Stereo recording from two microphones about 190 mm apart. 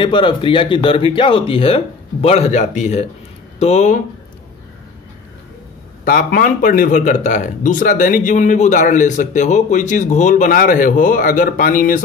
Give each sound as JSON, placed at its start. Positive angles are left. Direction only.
{"t": 0.0, "sound": "speech", "side_deg": 25}
{"t": 6.0, "sound": "a man's voice", "side_deg": 50}